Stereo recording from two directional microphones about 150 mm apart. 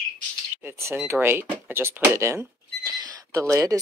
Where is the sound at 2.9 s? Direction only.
25° right (ahead or behind).